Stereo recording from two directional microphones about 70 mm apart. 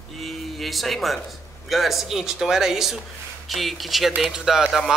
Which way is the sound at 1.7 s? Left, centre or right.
Centre.